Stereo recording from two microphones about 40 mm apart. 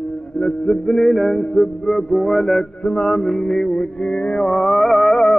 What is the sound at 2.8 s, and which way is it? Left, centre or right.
Music, centre.